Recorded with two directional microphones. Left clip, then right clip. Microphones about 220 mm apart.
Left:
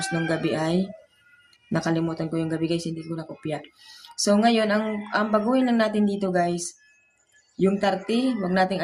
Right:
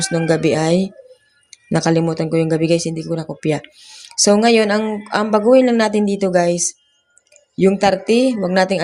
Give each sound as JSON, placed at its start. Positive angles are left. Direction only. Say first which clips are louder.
{"t": 0.0, "sound": "speech", "louder": "right 9 dB", "side_deg": -30}